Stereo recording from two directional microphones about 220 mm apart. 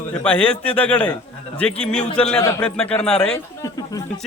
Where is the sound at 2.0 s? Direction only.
25° left (ahead or behind).